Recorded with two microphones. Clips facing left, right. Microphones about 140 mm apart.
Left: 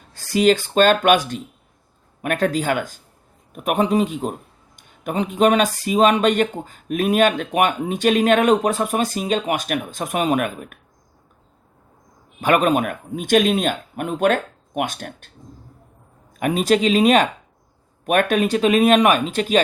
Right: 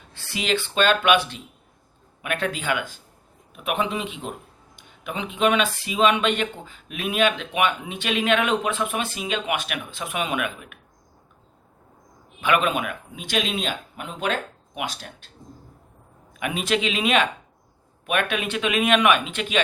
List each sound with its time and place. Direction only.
0.1 s speech: 40° left (ahead or behind)
12.4 s speech: 40° left (ahead or behind)
16.3 s speech: 40° left (ahead or behind)